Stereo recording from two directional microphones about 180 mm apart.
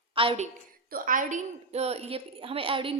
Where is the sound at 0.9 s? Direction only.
50° right (ahead or behind).